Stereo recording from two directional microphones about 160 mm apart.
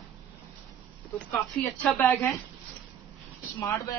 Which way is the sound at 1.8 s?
15° left (ahead or behind).